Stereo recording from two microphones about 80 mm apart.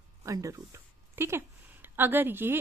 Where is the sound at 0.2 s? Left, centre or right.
Right.